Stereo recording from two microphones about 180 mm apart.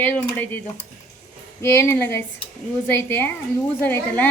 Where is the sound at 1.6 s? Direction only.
15° left (ahead or behind).